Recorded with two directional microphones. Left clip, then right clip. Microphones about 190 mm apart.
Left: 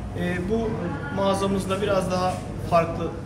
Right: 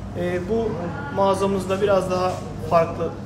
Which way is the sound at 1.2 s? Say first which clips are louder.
Right 4 dB; 25° right (ahead or behind).